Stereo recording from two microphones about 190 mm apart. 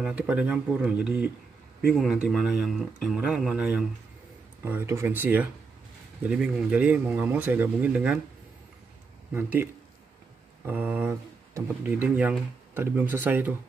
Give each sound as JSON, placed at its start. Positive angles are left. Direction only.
{"t": 0.0, "sound": "speech", "side_deg": -5}
{"t": 9.3, "sound": "speech", "side_deg": -10}